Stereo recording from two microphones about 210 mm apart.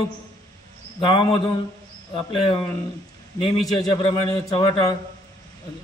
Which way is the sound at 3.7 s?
20° left (ahead or behind).